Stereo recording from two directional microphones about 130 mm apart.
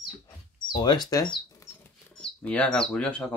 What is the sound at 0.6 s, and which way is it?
Speech, 35° left (ahead or behind).